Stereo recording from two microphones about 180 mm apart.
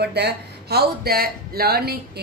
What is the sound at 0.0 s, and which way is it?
Speech, 65° right (ahead or behind).